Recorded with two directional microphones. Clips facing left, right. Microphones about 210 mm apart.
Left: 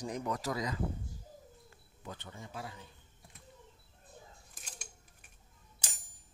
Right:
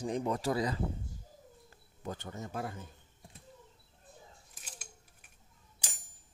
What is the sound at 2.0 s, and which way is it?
Speech, 45° right (ahead or behind).